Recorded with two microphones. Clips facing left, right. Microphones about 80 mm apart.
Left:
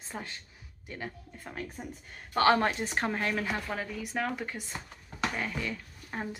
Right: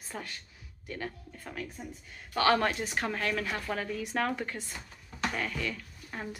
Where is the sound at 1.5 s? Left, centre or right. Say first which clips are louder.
Left 1 dB; left.